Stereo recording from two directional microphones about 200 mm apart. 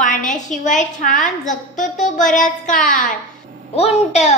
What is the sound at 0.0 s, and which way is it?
A child's voice, 40° left (ahead or behind).